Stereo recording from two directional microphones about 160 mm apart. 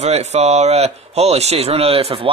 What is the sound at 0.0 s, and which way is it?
Speech, 45° right (ahead or behind).